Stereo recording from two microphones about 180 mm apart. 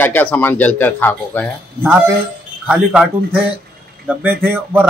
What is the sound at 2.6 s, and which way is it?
Speech, 5° right (ahead or behind).